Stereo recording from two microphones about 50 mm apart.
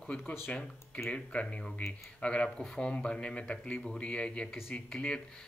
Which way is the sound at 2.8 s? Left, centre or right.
Centre.